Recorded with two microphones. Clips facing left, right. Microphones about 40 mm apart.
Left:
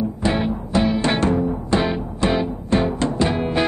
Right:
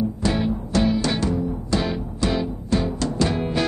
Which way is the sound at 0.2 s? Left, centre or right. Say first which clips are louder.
Left 2 dB; left.